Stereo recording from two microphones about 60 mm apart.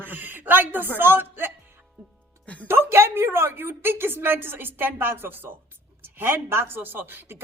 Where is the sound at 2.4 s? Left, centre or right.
Left.